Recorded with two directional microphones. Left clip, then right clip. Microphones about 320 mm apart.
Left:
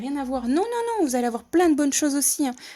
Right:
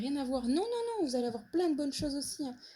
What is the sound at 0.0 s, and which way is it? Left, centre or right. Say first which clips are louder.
Speech: left 7 dB; centre.